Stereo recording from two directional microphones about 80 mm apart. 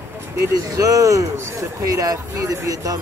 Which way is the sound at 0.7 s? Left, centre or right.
Right.